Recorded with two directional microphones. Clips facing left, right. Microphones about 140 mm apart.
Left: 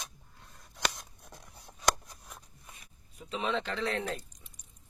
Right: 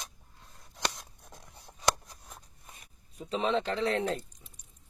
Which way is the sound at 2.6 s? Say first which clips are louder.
Even; 35° right (ahead or behind).